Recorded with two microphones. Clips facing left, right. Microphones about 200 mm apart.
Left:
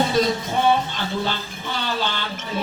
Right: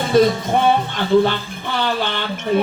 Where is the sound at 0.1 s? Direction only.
55° right (ahead or behind).